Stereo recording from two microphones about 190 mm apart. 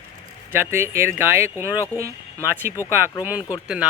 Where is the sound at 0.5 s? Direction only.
10° right (ahead or behind).